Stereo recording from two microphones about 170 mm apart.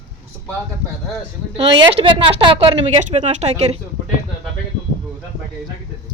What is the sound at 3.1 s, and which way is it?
Speech, 40° right (ahead or behind).